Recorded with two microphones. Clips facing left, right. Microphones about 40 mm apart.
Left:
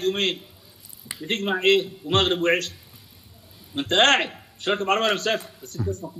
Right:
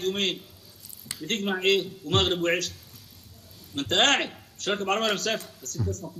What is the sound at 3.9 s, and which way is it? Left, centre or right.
Speech, centre.